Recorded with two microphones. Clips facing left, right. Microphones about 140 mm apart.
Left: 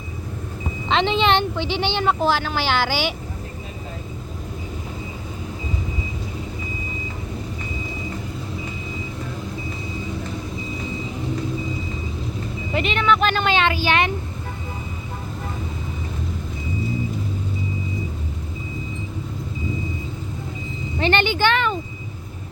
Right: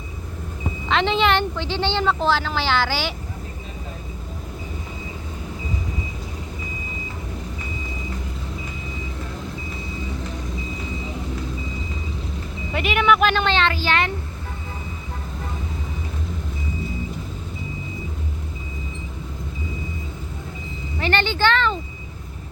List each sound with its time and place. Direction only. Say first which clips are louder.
0.9 s speech: left 1 dB; 20° left (ahead or behind)
12.7 s speech: right 1 dB; 5° right (ahead or behind)
13.4 s speech: left 1 dB; 15° left (ahead or behind)
21.0 s speech: left 2 dB; 20° left (ahead or behind)